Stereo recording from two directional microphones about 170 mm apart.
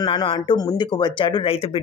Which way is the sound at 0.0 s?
30° left (ahead or behind).